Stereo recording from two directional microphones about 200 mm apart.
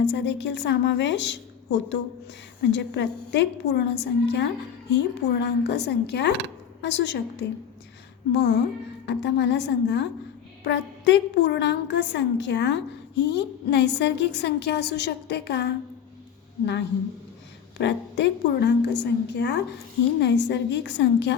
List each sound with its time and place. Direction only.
0.0 s a woman's voice: 60° left (ahead or behind)
17.7 s a woman's voice: 60° left (ahead or behind)